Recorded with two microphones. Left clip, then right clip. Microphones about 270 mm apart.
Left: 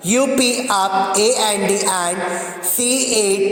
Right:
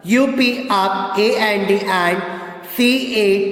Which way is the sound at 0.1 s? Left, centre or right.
Left.